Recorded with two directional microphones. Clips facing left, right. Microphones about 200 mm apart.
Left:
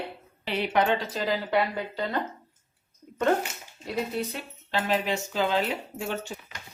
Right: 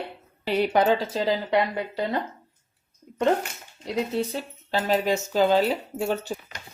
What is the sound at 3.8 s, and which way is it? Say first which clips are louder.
Speech: right 4 dB; 25° right (ahead or behind).